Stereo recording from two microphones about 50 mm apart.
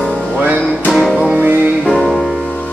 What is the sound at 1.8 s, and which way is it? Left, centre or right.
Music, centre.